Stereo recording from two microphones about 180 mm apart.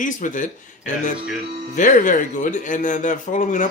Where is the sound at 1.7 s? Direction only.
45° left (ahead or behind).